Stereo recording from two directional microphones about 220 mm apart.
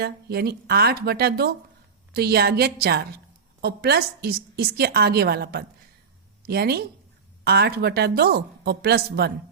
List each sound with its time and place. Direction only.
0.0 s a woman's voice: 45° right (ahead or behind)